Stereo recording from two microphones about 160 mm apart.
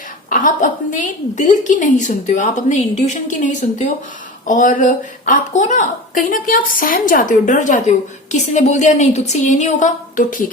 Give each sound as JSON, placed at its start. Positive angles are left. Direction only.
{"t": 0.3, "sound": "a woman's voice", "side_deg": 55}